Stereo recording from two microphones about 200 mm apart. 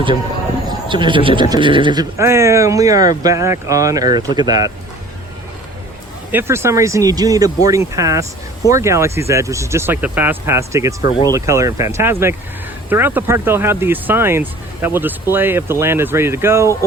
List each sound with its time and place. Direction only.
0.7 s a man's voice: 25° right (ahead or behind)
6.3 s speech: 15° right (ahead or behind)